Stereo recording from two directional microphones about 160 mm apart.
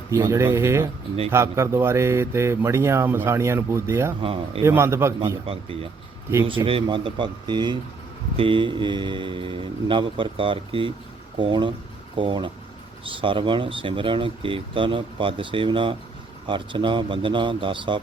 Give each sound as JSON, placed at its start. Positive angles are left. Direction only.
{"t": 0.1, "sound": "a man's voice", "side_deg": -20}
{"t": 4.2, "sound": "speech", "side_deg": -35}
{"t": 4.6, "sound": "a man's voice", "side_deg": -15}
{"t": 5.5, "sound": "speech", "side_deg": -35}